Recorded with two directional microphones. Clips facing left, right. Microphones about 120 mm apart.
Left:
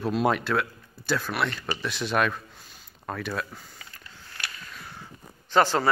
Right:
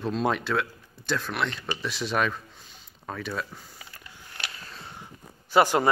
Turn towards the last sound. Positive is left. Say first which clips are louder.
# right 1 dB
turn(degrees=-15)  # may be behind; listen again after turning